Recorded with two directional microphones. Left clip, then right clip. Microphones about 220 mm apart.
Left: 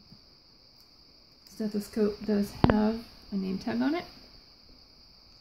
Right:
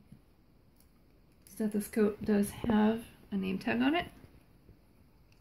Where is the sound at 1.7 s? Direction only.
35° left (ahead or behind).